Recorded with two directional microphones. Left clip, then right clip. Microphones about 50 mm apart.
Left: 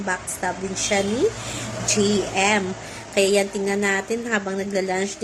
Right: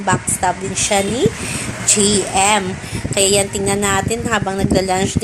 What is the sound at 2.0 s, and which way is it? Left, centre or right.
A woman's voice, centre.